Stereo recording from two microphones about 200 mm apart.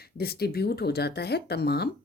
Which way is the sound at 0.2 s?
50° left (ahead or behind).